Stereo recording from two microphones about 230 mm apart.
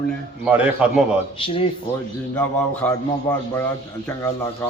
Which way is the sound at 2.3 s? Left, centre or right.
Centre.